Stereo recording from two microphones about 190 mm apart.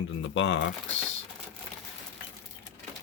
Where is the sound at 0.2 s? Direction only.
75° left (ahead or behind).